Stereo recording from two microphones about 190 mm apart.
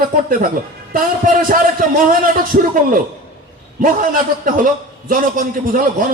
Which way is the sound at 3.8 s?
45° right (ahead or behind).